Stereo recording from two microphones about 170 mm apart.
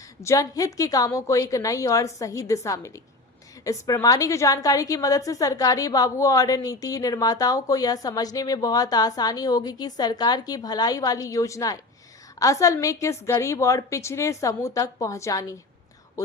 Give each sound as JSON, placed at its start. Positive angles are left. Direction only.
{"t": 0.2, "sound": "a woman's voice", "side_deg": 20}